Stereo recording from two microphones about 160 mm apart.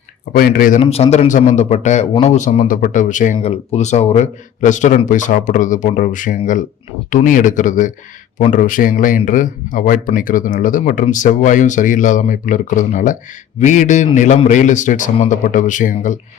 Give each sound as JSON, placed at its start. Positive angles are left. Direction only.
{"t": 0.3, "sound": "a man's voice", "side_deg": 60}
{"t": 0.8, "sound": "a man's voice", "side_deg": 40}